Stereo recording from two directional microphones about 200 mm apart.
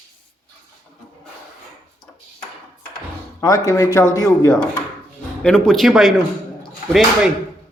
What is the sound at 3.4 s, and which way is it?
Speech, 15° left (ahead or behind).